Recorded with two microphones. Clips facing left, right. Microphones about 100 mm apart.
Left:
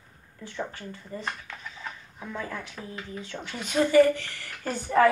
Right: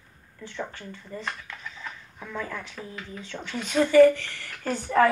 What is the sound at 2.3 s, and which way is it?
Speech, 15° left (ahead or behind).